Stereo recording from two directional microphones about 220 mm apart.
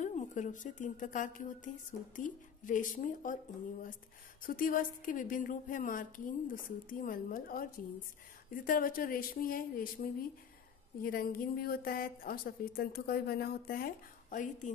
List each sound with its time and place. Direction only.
0.0 s a woman's voice: 35° left (ahead or behind)
4.4 s a woman's voice: 40° left (ahead or behind)